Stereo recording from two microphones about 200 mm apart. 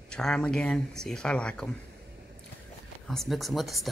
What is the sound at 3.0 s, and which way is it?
Speech, centre (ahead or behind).